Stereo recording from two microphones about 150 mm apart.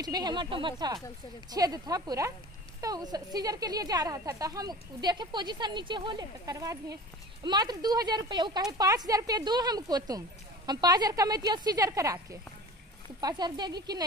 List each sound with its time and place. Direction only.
0.0 s a woman's voice: 25° right (ahead or behind)